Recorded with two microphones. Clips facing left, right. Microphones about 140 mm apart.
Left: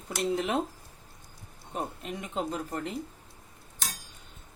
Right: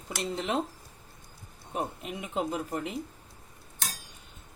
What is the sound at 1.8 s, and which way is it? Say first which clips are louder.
Speech: right 1 dB; 5° right (ahead or behind).